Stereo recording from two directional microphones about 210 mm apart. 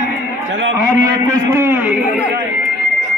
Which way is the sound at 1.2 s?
10° right (ahead or behind).